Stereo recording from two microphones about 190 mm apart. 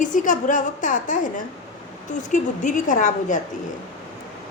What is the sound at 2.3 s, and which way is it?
A woman's voice, 40° left (ahead or behind).